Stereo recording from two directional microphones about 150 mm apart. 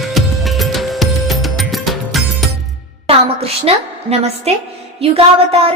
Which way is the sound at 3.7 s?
40° right (ahead or behind).